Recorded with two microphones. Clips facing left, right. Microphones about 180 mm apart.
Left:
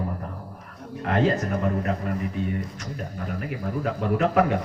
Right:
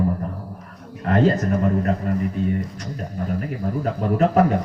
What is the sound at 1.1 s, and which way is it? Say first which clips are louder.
Speech: right 4 dB; 40° right (ahead or behind).